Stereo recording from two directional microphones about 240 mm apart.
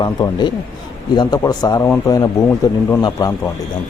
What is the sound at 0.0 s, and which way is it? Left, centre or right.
Speech, centre.